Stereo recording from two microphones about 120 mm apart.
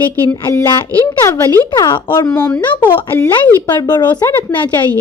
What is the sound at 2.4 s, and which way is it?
Speech, 15° left (ahead or behind).